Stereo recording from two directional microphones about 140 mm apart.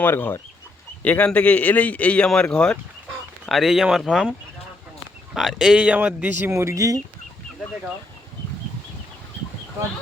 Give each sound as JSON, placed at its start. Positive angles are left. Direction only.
{"t": 0.0, "sound": "a man's voice", "side_deg": 15}